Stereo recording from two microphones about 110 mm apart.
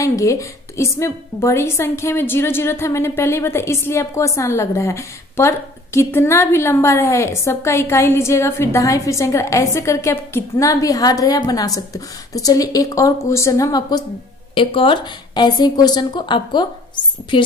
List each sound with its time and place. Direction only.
0.0 s a woman's voice: 30° left (ahead or behind)
14.5 s speech: 50° left (ahead or behind)